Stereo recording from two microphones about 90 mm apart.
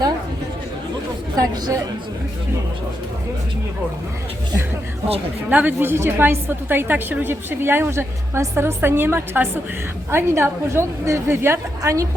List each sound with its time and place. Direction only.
1.4 s speech: 40° right (ahead or behind)
5.5 s a woman's voice: 20° right (ahead or behind); by 12.0 s 35° right (ahead or behind)